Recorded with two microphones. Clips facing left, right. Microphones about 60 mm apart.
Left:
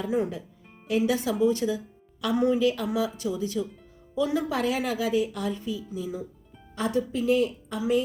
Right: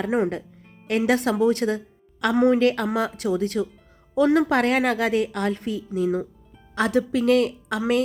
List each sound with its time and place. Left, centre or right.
0.0 s a woman's voice: right
6.7 s a woman's voice: right